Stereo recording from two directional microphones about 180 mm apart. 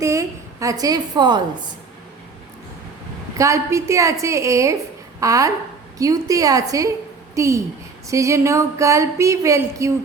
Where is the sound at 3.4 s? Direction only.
15° right (ahead or behind).